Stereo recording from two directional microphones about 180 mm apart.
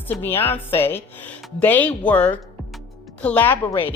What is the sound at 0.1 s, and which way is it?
Speech, 10° left (ahead or behind).